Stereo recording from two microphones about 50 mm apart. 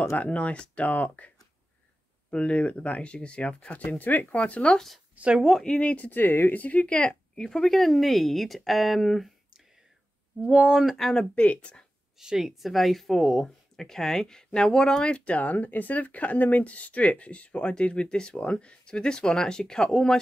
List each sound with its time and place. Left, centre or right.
0.2 s speech: left
2.3 s speech: left
4.7 s speech: centre
5.1 s speech: right
5.4 s speech: centre
5.8 s speech: left
6.0 s speech: left; by 9.3 s centre
10.4 s speech: centre
11.1 s speech: left
12.2 s speech: centre
13.2 s speech: centre
15.1 s speech: left; by 20.2 s centre